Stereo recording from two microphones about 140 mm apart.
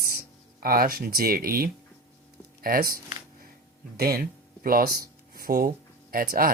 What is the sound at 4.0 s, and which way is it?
Speech, 90° right.